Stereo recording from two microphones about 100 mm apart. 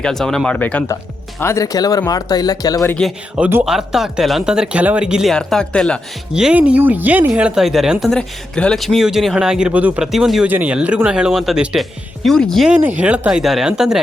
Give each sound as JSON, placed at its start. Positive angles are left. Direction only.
{"t": 0.0, "sound": "speech", "side_deg": 5}
{"t": 1.4, "sound": "speech", "side_deg": 30}
{"t": 3.6, "sound": "speech", "side_deg": -5}
{"t": 5.3, "sound": "speech", "side_deg": 5}
{"t": 6.3, "sound": "speech", "side_deg": -10}
{"t": 8.1, "sound": "speech", "side_deg": 5}
{"t": 10.1, "sound": "speech", "side_deg": -5}
{"t": 10.4, "sound": "speech", "side_deg": -15}
{"t": 12.7, "sound": "speech", "side_deg": -15}